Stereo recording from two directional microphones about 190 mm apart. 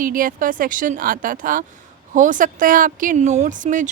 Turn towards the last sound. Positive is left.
turn(degrees=-40)  # may be behind; listen again after turning